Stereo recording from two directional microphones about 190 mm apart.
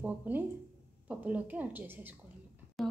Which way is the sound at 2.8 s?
Centre (ahead or behind).